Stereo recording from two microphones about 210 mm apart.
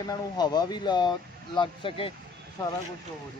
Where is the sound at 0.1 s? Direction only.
20° left (ahead or behind).